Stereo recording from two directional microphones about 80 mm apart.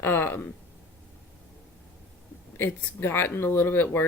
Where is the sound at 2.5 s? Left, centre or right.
Left.